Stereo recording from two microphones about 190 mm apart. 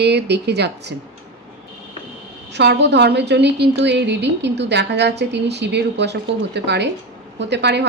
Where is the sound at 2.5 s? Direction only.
65° right (ahead or behind).